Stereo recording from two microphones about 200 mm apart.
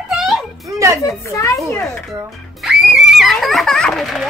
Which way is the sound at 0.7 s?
15° right (ahead or behind).